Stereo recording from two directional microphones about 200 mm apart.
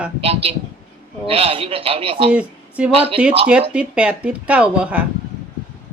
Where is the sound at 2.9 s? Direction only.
30° right (ahead or behind).